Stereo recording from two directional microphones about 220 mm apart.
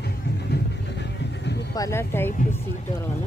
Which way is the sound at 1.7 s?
10° left (ahead or behind).